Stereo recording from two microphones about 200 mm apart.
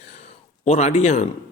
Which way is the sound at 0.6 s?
35° left (ahead or behind).